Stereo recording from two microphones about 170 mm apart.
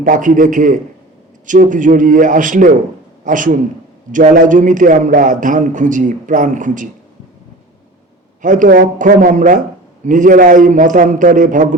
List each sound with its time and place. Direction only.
0.0 s a man's voice: 50° right (ahead or behind)
8.4 s a man's voice: 50° right (ahead or behind)